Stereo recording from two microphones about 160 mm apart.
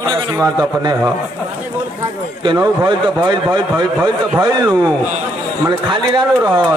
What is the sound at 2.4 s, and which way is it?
A man's voice, 25° right (ahead or behind).